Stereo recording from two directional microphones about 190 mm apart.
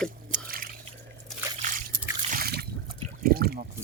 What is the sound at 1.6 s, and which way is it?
Trickle, 45° right (ahead or behind).